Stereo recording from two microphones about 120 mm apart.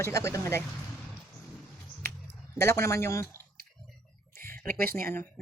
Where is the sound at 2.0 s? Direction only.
20° left (ahead or behind).